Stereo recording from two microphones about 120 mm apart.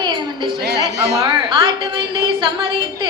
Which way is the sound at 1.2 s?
45° right (ahead or behind).